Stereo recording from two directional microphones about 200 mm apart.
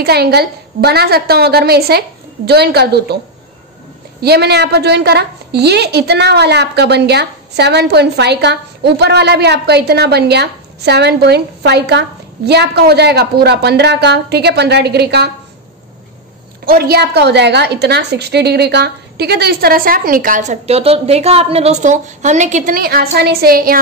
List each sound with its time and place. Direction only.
0.0 s a woman's voice: 50° right (ahead or behind)
4.2 s a woman's voice: 55° right (ahead or behind)
16.6 s a woman's voice: 50° right (ahead or behind)